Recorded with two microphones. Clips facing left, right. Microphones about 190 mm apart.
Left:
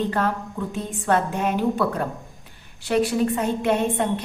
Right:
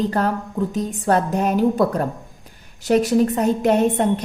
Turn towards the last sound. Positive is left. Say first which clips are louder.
# right 5 dB
turn(degrees=-40)  # may be behind; listen again after turning